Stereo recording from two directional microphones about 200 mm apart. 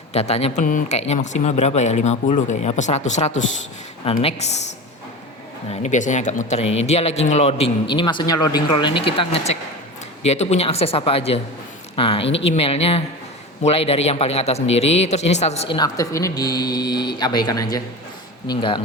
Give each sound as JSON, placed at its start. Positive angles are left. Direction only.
{"t": 0.1, "sound": "speech", "side_deg": 30}
{"t": 5.8, "sound": "speech", "side_deg": 35}